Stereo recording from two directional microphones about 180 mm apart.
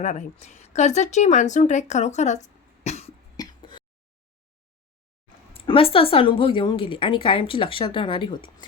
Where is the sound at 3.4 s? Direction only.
20° left (ahead or behind).